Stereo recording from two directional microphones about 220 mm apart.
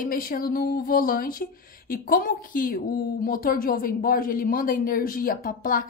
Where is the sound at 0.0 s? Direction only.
40° left (ahead or behind).